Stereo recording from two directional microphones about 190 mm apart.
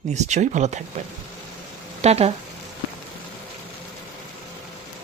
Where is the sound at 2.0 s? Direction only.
35° right (ahead or behind).